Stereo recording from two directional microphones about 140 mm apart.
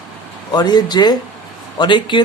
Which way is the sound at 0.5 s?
30° left (ahead or behind).